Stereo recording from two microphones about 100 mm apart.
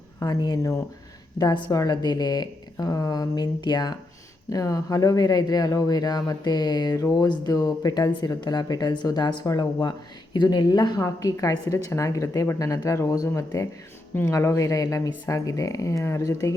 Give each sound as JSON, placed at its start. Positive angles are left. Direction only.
{"t": 0.2, "sound": "speech", "side_deg": 40}
{"t": 1.4, "sound": "speech", "side_deg": 45}